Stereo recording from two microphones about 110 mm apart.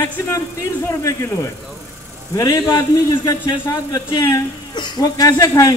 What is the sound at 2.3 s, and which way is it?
A man's voice, 35° left (ahead or behind).